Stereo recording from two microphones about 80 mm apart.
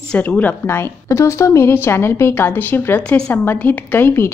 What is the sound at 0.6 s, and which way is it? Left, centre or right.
A woman's voice, left.